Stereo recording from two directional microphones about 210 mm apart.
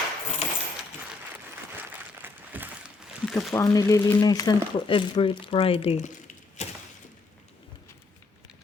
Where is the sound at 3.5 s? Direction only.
15° left (ahead or behind); by 6.7 s 35° left (ahead or behind).